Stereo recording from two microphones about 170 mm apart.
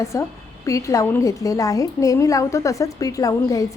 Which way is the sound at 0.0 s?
15° left (ahead or behind).